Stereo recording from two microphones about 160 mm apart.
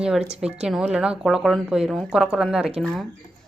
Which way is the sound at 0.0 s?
5° right (ahead or behind).